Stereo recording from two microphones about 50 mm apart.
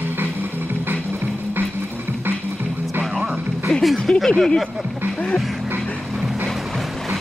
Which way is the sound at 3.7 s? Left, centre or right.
Centre.